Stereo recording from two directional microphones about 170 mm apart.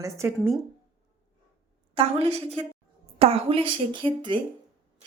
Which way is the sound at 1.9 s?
35° right (ahead or behind).